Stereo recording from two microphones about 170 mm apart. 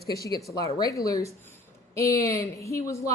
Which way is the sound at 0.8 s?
20° left (ahead or behind).